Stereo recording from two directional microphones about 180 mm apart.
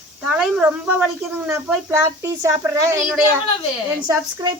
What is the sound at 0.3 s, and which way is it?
Speech, 5° right (ahead or behind).